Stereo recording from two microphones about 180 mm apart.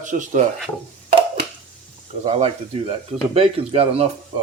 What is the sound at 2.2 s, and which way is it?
Speech, 40° right (ahead or behind).